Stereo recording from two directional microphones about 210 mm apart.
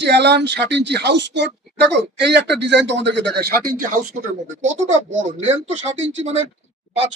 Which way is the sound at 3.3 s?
45° right (ahead or behind).